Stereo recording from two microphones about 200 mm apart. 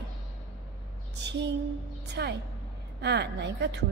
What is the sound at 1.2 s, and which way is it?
A woman's voice, 60° right (ahead or behind).